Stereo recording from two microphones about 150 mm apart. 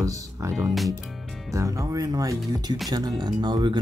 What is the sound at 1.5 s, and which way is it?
Speech, 20° right (ahead or behind).